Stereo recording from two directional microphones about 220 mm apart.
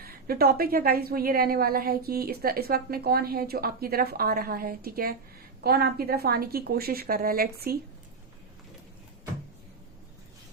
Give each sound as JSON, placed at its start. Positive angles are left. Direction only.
{"t": 0.0, "sound": "a woman's voice", "side_deg": -45}